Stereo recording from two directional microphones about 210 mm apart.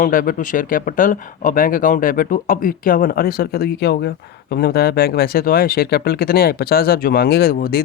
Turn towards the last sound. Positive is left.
turn(degrees=45)  # may be behind; listen again after turning